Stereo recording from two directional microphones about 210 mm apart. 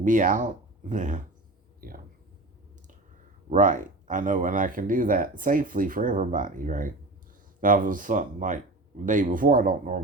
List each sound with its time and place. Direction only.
0.0 s speech: 40° right (ahead or behind)
3.5 s speech: 40° right (ahead or behind)